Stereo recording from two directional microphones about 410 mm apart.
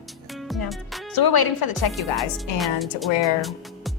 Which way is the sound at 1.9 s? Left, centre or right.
Centre.